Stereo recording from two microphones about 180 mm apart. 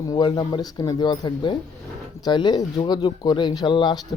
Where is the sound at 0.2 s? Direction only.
25° left (ahead or behind).